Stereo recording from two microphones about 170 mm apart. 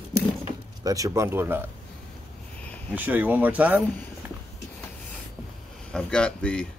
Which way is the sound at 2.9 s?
10° right (ahead or behind).